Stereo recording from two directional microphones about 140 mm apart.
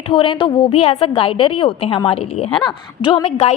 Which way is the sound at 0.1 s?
40° left (ahead or behind).